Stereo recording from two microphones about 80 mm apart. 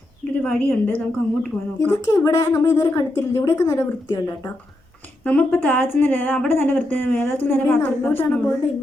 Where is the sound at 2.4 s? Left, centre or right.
Left.